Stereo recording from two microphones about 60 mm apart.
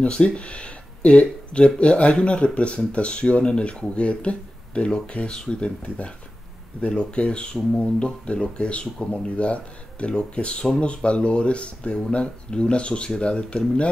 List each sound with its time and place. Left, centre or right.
0.0 s speech: centre